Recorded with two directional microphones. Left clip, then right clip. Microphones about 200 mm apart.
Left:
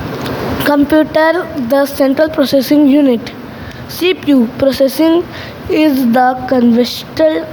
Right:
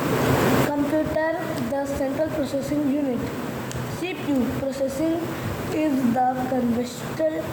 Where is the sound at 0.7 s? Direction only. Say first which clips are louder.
Left 13 dB; 50° left (ahead or behind).